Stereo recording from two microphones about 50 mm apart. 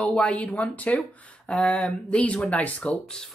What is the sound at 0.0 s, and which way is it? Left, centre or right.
Speech, left.